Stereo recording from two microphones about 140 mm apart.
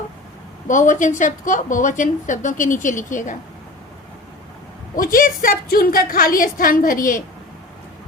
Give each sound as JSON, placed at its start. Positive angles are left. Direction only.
{"t": 0.7, "sound": "a woman's voice", "side_deg": 65}
{"t": 4.9, "sound": "a woman's voice", "side_deg": 90}